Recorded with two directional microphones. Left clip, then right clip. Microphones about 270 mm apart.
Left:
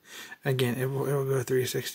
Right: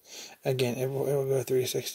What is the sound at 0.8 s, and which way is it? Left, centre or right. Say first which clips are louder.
Speech: right 1 dB; centre.